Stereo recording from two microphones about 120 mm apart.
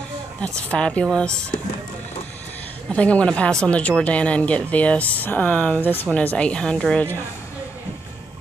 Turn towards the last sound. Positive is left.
turn(degrees=10)  # may be behind; listen again after turning